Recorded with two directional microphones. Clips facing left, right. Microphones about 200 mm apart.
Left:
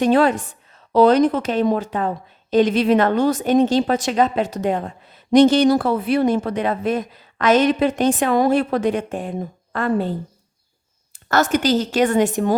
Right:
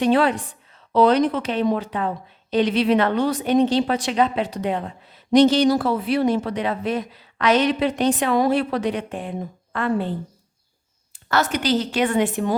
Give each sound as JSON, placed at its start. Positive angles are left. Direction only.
{"t": 0.0, "sound": "a woman's voice", "side_deg": 45}